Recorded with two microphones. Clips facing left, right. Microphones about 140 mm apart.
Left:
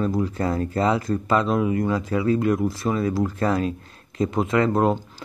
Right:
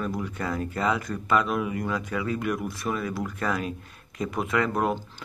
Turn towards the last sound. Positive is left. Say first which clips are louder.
# left 6 dB
turn(degrees=25)  # may be behind; listen again after turning